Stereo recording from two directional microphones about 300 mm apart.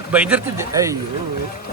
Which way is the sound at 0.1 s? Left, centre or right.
Centre.